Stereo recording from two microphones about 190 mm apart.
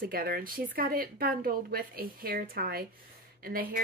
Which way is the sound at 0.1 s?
50° right (ahead or behind).